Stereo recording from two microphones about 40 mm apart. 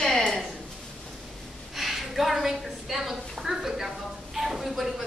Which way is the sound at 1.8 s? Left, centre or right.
Centre.